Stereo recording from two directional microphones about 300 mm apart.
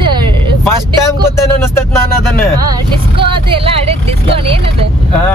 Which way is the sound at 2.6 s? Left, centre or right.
Centre.